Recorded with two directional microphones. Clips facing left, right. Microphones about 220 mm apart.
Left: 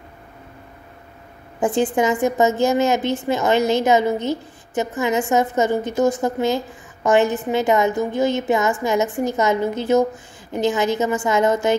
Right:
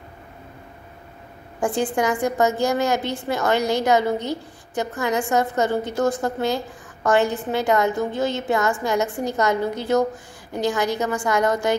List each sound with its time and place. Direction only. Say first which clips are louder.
1.6 s a woman's voice: left 3 dB; 20° left (ahead or behind)